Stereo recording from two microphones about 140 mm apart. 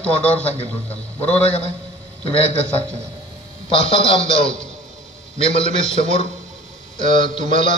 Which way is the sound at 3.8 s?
40° left (ahead or behind).